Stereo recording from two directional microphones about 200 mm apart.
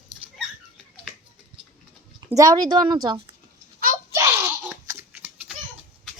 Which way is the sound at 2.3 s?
20° right (ahead or behind).